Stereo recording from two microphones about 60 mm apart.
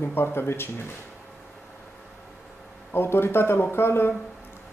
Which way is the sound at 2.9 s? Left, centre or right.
Left.